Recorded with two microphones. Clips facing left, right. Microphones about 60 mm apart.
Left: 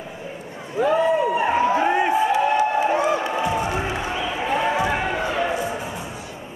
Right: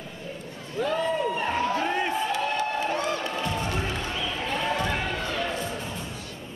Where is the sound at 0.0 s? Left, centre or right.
Left.